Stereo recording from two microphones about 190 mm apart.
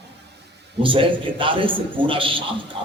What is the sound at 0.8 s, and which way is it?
A man's voice, 25° right (ahead or behind).